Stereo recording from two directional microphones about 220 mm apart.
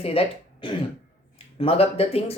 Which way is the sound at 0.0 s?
25° left (ahead or behind).